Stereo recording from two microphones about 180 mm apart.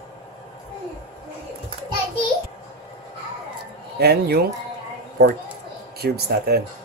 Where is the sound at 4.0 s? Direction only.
60° right (ahead or behind).